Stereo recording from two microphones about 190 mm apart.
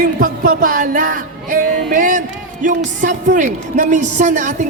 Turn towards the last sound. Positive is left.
turn(degrees=-40)  # may be behind; listen again after turning